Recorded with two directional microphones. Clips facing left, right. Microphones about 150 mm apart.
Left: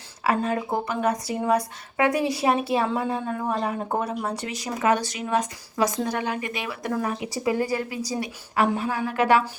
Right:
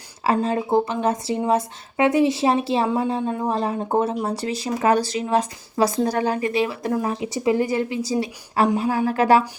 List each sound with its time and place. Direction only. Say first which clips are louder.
0.3 s speech: right 4 dB; 25° right (ahead or behind)